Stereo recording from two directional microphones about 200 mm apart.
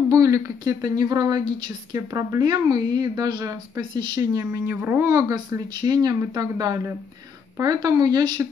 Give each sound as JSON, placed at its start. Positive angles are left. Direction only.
{"t": 0.1, "sound": "a woman's voice", "side_deg": -15}